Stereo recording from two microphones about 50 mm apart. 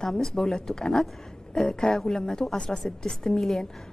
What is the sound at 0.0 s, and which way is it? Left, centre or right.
A woman's voice, centre.